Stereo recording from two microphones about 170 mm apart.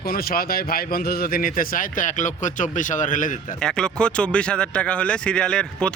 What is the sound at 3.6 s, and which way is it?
Speech, 5° left (ahead or behind).